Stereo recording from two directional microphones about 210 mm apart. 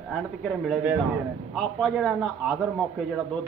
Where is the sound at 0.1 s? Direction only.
5° left (ahead or behind).